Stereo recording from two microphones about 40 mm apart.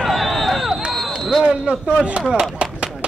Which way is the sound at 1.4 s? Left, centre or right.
Right.